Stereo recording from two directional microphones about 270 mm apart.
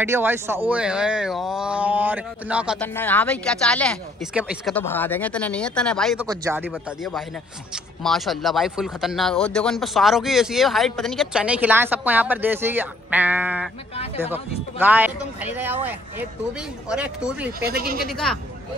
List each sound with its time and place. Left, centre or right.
0.0 s speech: centre
2.9 s speech: centre
6.2 s speech: centre
6.7 s speech: centre
17.7 s speech: right
18.0 s speech: centre